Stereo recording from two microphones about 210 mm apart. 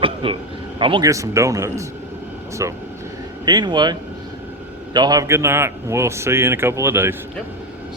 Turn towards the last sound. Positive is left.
turn(degrees=-10)  # may be behind; listen again after turning